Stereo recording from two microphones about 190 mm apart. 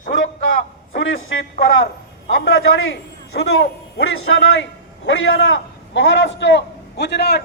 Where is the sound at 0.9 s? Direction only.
90° left.